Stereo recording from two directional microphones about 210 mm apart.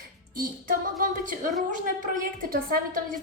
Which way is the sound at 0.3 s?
40° right (ahead or behind).